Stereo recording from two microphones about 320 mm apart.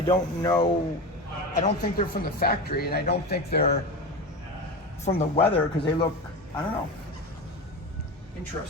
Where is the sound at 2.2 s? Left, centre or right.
Left.